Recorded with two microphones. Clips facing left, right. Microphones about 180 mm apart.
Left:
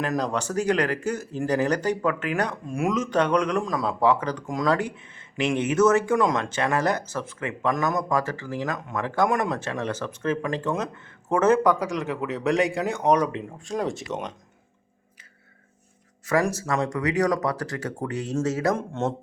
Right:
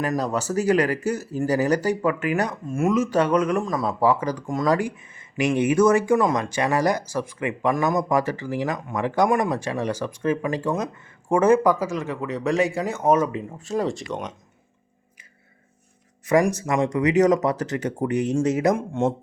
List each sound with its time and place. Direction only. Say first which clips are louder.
0.0 s speech: right 2 dB; 5° right (ahead or behind)
16.2 s speech: right 4 dB; 15° right (ahead or behind)